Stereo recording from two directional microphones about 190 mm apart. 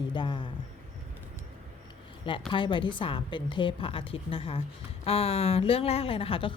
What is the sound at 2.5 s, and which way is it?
A woman's voice, 25° left (ahead or behind).